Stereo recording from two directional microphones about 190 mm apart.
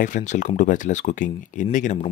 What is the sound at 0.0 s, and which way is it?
Speech, 40° left (ahead or behind).